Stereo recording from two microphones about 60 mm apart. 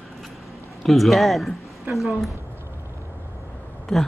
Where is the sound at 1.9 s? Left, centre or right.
Right.